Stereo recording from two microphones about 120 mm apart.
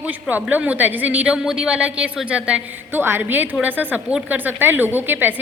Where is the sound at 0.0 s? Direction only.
15° right (ahead or behind).